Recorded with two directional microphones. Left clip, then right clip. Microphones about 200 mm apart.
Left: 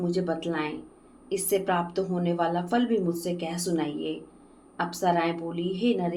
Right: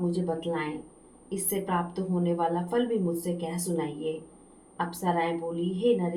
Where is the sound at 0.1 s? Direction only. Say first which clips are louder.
Left 2 dB; 45° left (ahead or behind).